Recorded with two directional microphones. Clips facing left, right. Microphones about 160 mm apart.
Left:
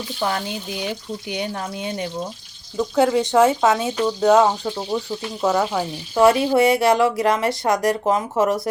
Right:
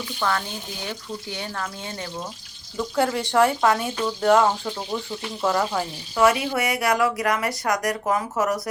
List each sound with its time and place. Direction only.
0.2 s speech: 20° left (ahead or behind)
6.1 s speech: 30° left (ahead or behind)